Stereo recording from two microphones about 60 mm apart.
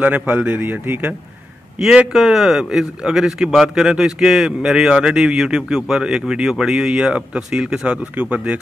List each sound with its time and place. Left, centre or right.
0.0 s a man's voice: right
0.6 s speech: right
2.1 s a man's voice: centre